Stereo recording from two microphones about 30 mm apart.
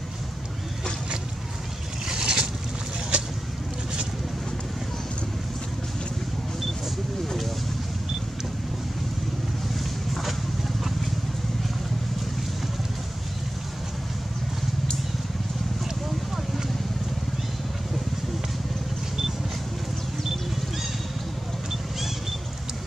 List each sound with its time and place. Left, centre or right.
2.0 s boat: right
3.1 s vehicle: right
10.1 s horse: centre